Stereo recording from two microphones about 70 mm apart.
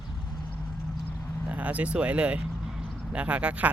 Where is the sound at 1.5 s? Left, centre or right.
Right.